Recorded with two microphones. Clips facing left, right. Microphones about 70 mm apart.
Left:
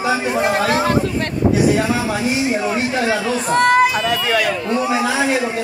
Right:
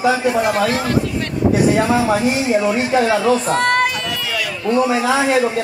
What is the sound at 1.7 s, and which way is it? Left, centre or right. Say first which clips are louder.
Speech: right 3 dB; right.